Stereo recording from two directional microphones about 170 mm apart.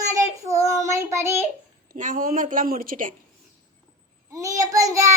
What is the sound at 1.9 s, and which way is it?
A woman's voice, 50° right (ahead or behind).